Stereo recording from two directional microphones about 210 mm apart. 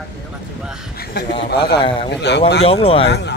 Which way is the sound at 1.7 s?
25° left (ahead or behind).